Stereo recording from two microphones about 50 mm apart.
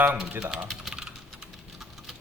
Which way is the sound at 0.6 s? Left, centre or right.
Centre.